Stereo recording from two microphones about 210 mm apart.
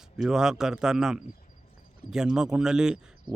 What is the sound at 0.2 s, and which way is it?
Speech, 5° right (ahead or behind).